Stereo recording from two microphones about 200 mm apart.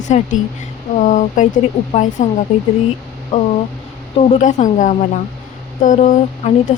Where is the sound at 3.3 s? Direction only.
35° left (ahead or behind).